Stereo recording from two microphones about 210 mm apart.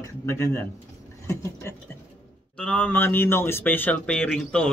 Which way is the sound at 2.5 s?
5° left (ahead or behind).